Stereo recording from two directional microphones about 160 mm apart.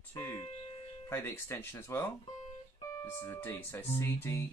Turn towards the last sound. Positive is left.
turn(degrees=15)  # may be behind; listen again after turning